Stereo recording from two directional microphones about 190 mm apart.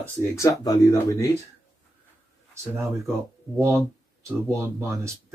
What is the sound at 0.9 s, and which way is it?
Speech, 15° left (ahead or behind).